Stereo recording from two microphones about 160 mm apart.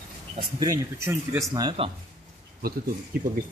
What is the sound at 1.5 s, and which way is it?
Speech, 30° right (ahead or behind).